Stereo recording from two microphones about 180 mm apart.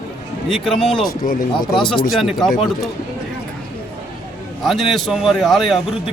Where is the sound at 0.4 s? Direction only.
Centre (ahead or behind).